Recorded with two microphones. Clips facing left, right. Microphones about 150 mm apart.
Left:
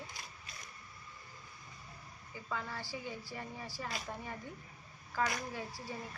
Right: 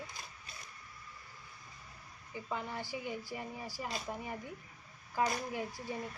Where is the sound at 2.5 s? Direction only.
20° right (ahead or behind).